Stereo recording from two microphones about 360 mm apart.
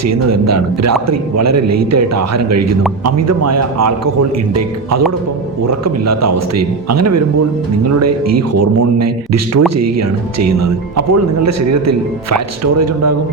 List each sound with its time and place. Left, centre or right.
0.0 s speech: right